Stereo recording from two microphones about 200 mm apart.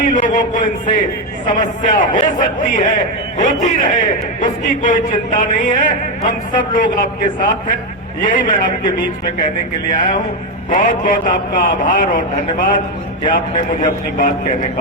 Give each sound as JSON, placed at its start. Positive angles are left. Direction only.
{"t": 0.0, "sound": "a man's voice", "side_deg": 40}